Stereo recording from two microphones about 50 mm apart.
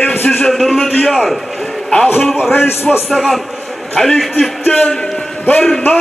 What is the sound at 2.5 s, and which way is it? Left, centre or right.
Speech, left.